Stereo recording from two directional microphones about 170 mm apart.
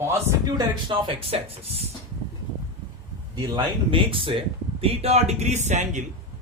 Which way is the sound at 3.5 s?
30° right (ahead or behind).